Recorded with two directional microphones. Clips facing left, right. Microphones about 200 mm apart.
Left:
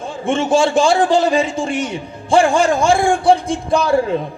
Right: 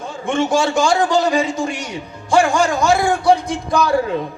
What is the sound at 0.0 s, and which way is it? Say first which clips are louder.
A man's voice: left 1 dB; 30° left (ahead or behind).